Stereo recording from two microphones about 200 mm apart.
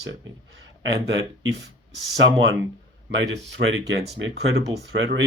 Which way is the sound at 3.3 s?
65° right (ahead or behind).